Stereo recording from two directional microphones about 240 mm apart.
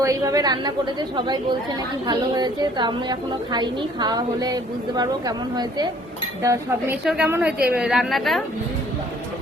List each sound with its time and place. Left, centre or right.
0.0 s a woman's voice: centre
2.0 s a woman's voice: centre